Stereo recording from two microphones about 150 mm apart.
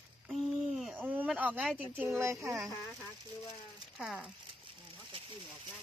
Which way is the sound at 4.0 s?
5° right (ahead or behind).